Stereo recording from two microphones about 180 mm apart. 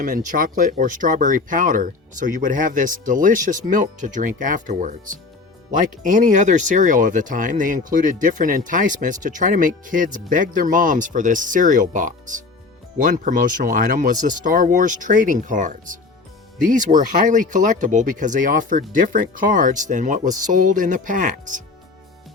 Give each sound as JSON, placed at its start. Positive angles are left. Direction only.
{"t": 0.0, "sound": "speech", "side_deg": -50}